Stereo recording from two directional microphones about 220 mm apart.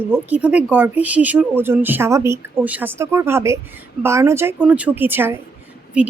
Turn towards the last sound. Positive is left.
turn(degrees=-5)  # may be behind; listen again after turning